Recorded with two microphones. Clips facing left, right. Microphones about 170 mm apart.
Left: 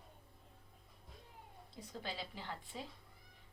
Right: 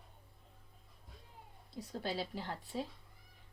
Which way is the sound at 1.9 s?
40° right (ahead or behind).